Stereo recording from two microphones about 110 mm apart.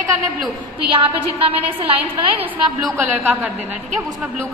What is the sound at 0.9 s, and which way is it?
A woman's voice, 55° right (ahead or behind).